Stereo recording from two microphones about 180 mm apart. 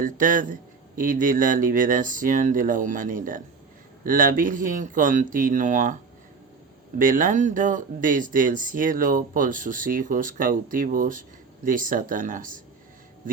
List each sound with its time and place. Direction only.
0.0 s speech: 50° right (ahead or behind)
7.0 s speech: 45° right (ahead or behind)